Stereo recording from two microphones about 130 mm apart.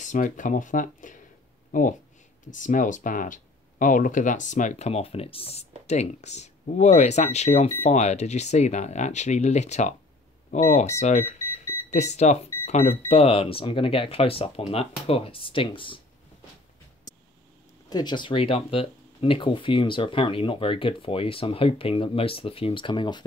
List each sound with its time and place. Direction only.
0.0 s speech: 80° left; by 5.7 s 50° left (ahead or behind)
5.9 s speech: 60° left (ahead or behind); by 16.0 s 40° left (ahead or behind)
17.8 s speech: 35° left (ahead or behind)